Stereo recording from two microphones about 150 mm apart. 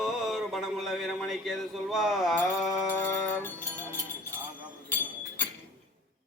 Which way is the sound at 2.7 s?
15° left (ahead or behind).